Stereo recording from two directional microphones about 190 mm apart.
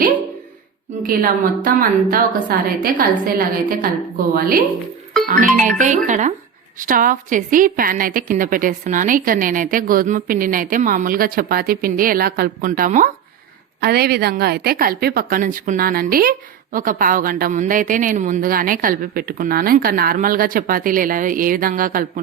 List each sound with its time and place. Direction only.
1.0 s a woman's voice: 50° right (ahead or behind)
13.8 s a woman's voice: 55° right (ahead or behind)